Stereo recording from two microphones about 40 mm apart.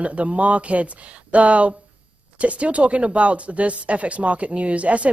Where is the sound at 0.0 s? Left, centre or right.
Right.